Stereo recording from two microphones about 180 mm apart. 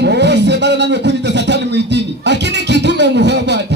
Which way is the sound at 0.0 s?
70° right (ahead or behind).